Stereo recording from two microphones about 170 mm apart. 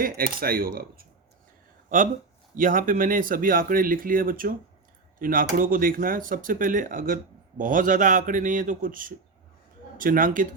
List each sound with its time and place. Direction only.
0.0 s speech: 60° right (ahead or behind)
2.6 s speech: 55° right (ahead or behind)